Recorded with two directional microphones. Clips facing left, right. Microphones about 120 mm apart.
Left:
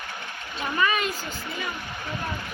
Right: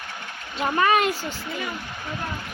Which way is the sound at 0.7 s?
60° right (ahead or behind).